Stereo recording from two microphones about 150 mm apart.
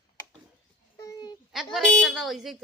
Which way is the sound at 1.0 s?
30° left (ahead or behind).